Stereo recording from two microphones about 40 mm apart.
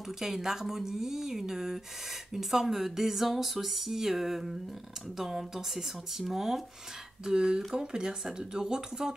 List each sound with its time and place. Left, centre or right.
0.2 s speech: centre
7.2 s speech: centre